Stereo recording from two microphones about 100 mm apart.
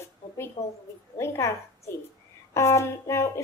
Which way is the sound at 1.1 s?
25° left (ahead or behind).